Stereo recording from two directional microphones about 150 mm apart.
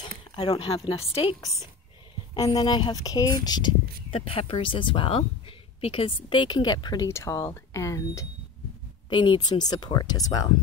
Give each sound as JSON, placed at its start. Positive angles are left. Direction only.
{"t": 0.4, "sound": "speech", "side_deg": 35}
{"t": 2.4, "sound": "speech", "side_deg": 35}
{"t": 9.1, "sound": "speech", "side_deg": 30}